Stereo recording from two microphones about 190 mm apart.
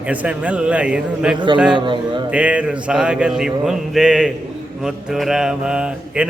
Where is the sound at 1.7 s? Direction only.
25° right (ahead or behind).